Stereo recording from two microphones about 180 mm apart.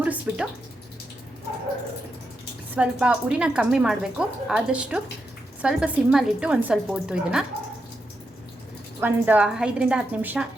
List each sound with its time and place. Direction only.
0.0 s speech: 5° right (ahead or behind)
2.7 s a woman's voice: 5° right (ahead or behind)
9.0 s a woman's voice: 10° right (ahead or behind)